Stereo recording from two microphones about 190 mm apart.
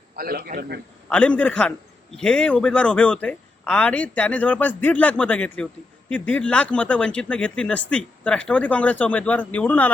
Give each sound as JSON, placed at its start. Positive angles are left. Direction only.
{"t": 0.2, "sound": "a man's voice", "side_deg": -55}
{"t": 1.1, "sound": "a man's voice", "side_deg": 5}